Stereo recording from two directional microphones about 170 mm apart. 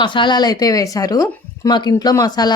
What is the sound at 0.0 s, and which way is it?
Speech, 30° left (ahead or behind).